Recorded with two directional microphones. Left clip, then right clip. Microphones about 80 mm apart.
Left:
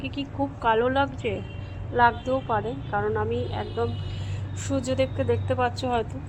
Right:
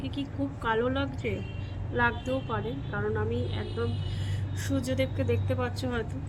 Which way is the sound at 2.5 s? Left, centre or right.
Right.